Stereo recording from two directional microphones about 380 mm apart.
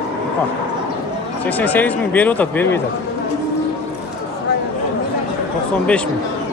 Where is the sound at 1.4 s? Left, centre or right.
Centre.